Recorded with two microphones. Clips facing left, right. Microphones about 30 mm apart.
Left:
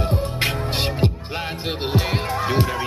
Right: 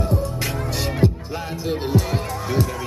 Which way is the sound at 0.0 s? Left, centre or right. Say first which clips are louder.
Left 1 dB; left.